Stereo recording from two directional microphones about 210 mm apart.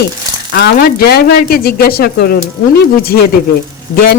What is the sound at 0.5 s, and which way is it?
Speech, 50° left (ahead or behind).